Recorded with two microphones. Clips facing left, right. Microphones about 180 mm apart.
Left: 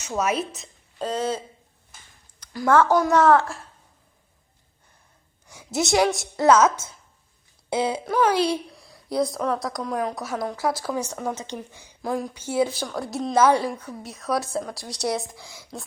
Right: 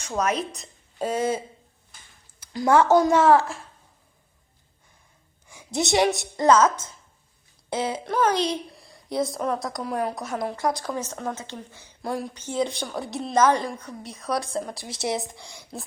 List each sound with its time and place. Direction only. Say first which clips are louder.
0.0 s a woman's voice: left 1 dB; 5° left (ahead or behind)
0.9 s speech: right 1 dB; 10° right (ahead or behind)
2.5 s a woman's voice: right 1 dB; 15° right (ahead or behind)
5.5 s a woman's voice: left 1 dB; centre (ahead or behind)
12.0 s a woman's voice: left 2 dB; centre (ahead or behind)
12.3 s a woman's voice: left 3 dB; 10° left (ahead or behind)